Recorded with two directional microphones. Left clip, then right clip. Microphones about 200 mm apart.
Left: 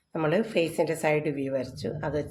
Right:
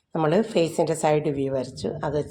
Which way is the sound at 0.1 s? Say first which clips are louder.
Right 4 dB; 25° right (ahead or behind).